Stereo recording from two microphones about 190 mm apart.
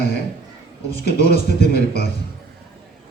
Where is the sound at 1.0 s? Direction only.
55° left (ahead or behind).